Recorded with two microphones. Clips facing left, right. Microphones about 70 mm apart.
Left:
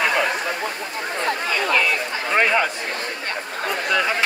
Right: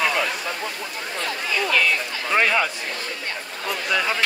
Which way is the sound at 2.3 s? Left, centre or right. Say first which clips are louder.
Left 1 dB; centre.